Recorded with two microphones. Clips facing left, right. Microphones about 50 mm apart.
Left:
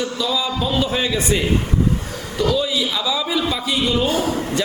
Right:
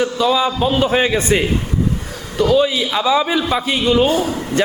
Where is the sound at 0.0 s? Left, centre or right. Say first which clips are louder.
Right 6 dB; right.